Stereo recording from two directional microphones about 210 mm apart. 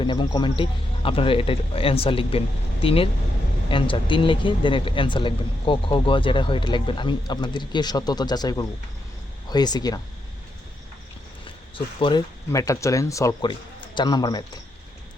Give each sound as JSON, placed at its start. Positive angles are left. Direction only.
{"t": 0.0, "sound": "speech", "side_deg": 20}
{"t": 11.9, "sound": "a man's voice", "side_deg": 25}